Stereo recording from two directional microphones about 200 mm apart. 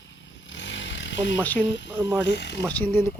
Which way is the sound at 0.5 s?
65° left (ahead or behind).